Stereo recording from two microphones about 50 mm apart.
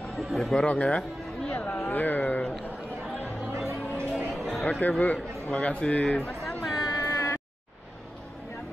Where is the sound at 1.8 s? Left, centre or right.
Left.